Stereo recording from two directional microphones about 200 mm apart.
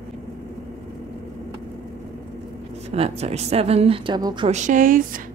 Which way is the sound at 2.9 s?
30° right (ahead or behind).